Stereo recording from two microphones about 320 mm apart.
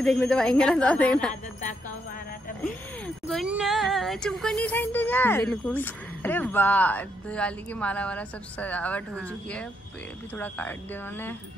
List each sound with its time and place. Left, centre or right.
0.0 s speech: centre
1.3 s jingle bell: left
3.3 s speech: centre